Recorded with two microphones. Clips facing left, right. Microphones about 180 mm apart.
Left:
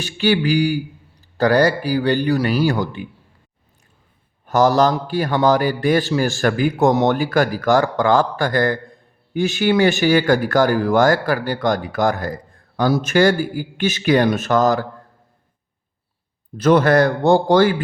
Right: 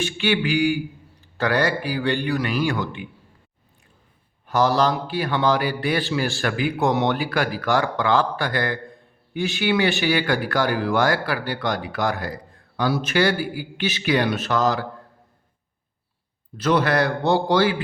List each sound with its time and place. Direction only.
0.0 s a man's voice: 40° left (ahead or behind)
4.4 s speech: 45° left (ahead or behind)
16.6 s speech: 45° left (ahead or behind)